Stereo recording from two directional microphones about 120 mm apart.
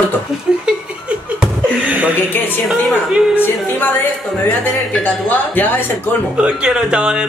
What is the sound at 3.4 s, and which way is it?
Speech, 15° left (ahead or behind).